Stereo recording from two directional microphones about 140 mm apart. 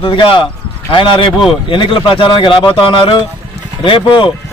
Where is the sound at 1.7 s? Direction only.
35° left (ahead or behind).